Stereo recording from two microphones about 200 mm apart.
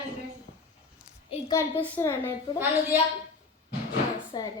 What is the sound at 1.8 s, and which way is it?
Speech, 10° left (ahead or behind).